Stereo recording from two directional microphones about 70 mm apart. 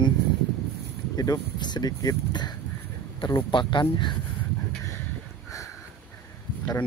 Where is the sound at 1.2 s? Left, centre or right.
Left.